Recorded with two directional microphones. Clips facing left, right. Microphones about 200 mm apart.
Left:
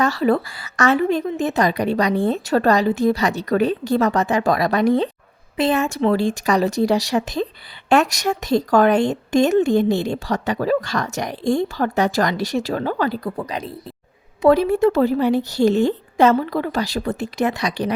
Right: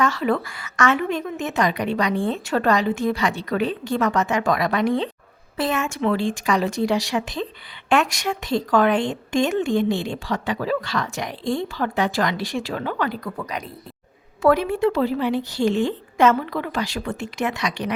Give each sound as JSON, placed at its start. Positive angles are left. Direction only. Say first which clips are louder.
{"t": 0.0, "sound": "a woman's voice", "louder": "left 3 dB", "side_deg": 35}